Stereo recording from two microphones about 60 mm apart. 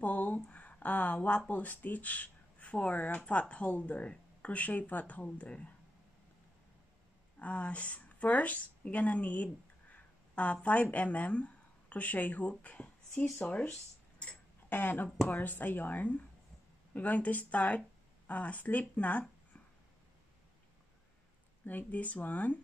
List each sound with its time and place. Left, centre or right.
0.0 s a sound: left
1.5 s speech: left
7.3 s speech: left
14.7 s speech: left
21.6 s speech: left